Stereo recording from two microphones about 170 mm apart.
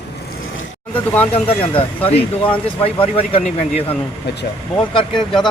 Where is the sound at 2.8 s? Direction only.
35° left (ahead or behind).